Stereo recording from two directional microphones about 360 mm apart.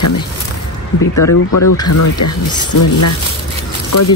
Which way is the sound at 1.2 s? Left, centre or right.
Left.